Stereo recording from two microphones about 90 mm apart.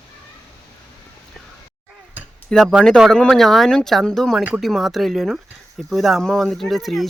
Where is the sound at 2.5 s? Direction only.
Centre (ahead or behind).